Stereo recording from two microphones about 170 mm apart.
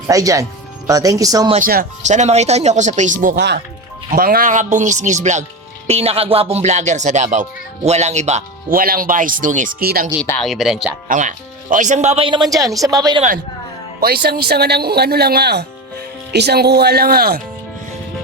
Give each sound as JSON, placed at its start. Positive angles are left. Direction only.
{"t": 0.1, "sound": "speech", "side_deg": -20}
{"t": 1.5, "sound": "speech", "side_deg": -55}
{"t": 5.9, "sound": "music", "side_deg": -35}
{"t": 8.8, "sound": "speech", "side_deg": -55}
{"t": 10.4, "sound": "speech", "side_deg": 0}
{"t": 11.1, "sound": "music", "side_deg": -50}
{"t": 12.8, "sound": "speech", "side_deg": -20}
{"t": 14.0, "sound": "speech", "side_deg": -65}